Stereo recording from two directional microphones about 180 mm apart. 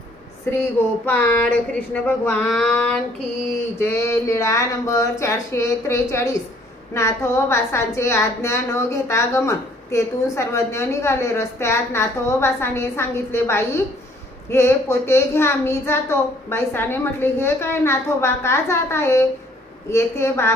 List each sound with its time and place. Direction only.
0.5 s a woman's voice: 10° left (ahead or behind)
3.8 s a woman's voice: 15° left (ahead or behind)